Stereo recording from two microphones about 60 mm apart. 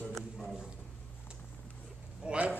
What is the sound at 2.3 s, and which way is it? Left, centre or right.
Speech, centre.